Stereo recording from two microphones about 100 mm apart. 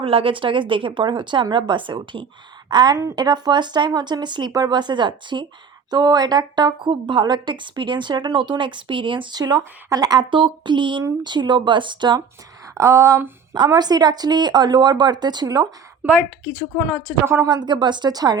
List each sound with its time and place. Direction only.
0.0 s a woman's voice: 65° right (ahead or behind); by 12.2 s 50° right (ahead or behind)
12.7 s a sound: 30° right (ahead or behind)
13.5 s a woman's voice: 40° right (ahead or behind)
17.2 s speech: 25° right (ahead or behind)
17.5 s a woman's voice: 50° right (ahead or behind)